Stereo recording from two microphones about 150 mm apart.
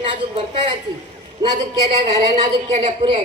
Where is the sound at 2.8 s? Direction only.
35° right (ahead or behind).